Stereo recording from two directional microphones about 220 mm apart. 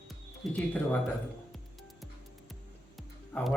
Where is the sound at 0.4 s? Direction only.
Centre (ahead or behind).